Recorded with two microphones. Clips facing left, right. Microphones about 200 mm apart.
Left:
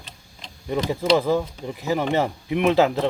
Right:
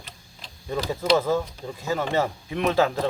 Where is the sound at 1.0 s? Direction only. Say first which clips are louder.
Left 2 dB; 15° left (ahead or behind).